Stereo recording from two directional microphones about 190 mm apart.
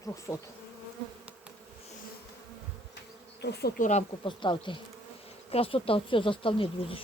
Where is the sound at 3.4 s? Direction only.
60° left (ahead or behind).